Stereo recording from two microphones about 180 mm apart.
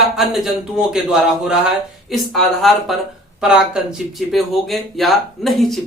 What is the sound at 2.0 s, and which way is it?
Speech, centre (ahead or behind).